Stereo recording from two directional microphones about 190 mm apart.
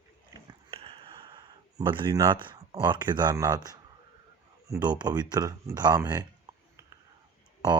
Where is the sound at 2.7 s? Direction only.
25° right (ahead or behind).